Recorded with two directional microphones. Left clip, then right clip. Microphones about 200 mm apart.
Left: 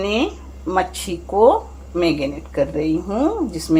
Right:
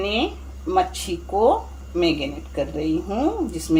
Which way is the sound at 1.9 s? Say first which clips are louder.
Left 2 dB; 20° left (ahead or behind).